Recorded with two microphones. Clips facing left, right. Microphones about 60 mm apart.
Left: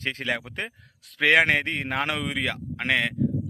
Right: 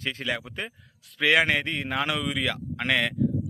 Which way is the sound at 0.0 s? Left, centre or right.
Left.